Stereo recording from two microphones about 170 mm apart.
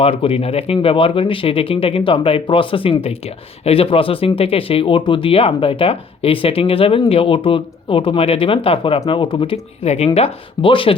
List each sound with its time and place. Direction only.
0.0 s speech: 30° left (ahead or behind)